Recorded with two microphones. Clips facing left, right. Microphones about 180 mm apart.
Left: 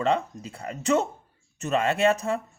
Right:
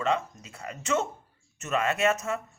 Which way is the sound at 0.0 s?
35° left (ahead or behind).